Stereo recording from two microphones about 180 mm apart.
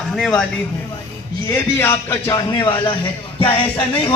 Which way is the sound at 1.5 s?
15° left (ahead or behind).